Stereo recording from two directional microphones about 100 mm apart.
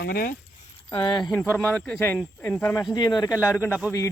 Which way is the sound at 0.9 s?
45° left (ahead or behind).